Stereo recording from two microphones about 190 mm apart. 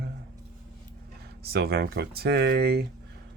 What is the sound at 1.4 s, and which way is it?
Speech, 55° right (ahead or behind).